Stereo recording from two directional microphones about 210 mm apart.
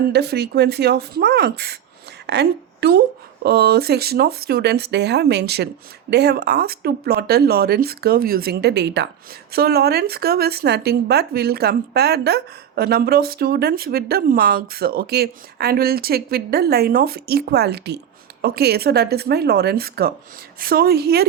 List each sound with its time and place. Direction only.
0.1 s a woman's voice: 50° right (ahead or behind)